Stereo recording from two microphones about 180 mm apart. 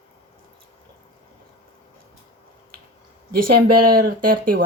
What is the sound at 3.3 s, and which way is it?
Speech, 55° right (ahead or behind).